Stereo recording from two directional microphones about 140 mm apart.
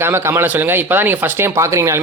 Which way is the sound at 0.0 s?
20° right (ahead or behind).